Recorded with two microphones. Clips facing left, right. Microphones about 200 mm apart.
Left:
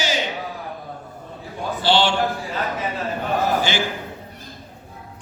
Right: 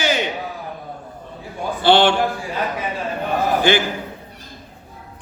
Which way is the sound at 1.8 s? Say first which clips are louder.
Right 5 dB; 60° right (ahead or behind).